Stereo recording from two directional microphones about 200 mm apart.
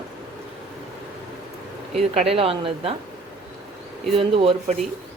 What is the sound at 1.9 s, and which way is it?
Speech, 30° right (ahead or behind).